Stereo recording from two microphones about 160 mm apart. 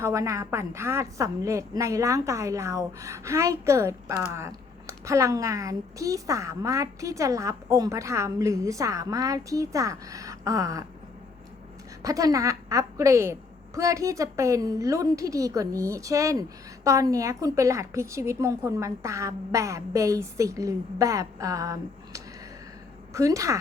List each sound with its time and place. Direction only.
0.0 s a woman's voice: 20° right (ahead or behind)
12.0 s a woman's voice: 20° right (ahead or behind)